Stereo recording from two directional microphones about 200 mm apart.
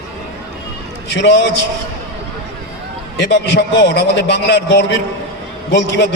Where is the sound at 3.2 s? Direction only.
60° left (ahead or behind).